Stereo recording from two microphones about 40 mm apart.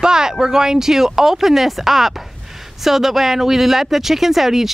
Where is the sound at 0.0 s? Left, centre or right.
Centre.